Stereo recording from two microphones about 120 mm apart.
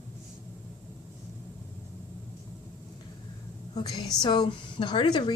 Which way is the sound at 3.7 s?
35° left (ahead or behind).